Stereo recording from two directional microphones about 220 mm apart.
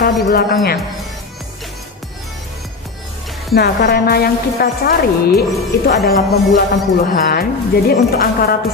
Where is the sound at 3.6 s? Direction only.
45° left (ahead or behind).